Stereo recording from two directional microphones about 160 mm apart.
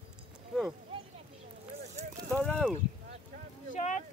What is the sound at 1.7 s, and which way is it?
Clip-clop, 45° right (ahead or behind).